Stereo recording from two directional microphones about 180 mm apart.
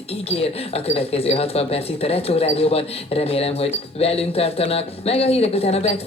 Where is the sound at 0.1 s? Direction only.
35° left (ahead or behind).